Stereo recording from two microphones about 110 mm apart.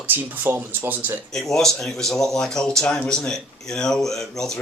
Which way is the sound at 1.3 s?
5° left (ahead or behind).